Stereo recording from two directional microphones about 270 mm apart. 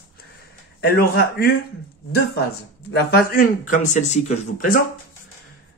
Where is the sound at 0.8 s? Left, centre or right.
Left.